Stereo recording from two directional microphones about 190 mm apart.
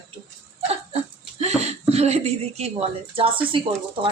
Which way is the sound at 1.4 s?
35° right (ahead or behind).